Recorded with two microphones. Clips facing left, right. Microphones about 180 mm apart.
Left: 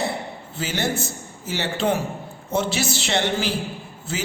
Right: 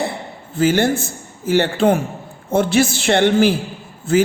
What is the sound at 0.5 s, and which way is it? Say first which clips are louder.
A man's voice: right 10 dB; 50° right (ahead or behind).